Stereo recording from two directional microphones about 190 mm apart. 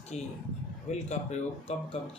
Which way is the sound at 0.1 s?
35° left (ahead or behind).